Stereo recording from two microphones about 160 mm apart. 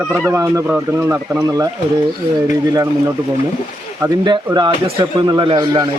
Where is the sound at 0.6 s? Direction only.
10° right (ahead or behind).